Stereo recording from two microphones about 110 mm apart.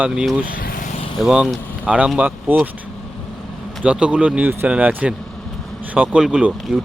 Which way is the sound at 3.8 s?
10° right (ahead or behind).